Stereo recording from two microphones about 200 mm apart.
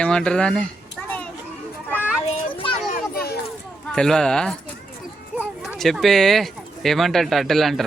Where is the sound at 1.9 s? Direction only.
5° right (ahead or behind).